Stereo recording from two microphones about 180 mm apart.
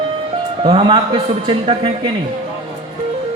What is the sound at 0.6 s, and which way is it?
Speech, 30° right (ahead or behind).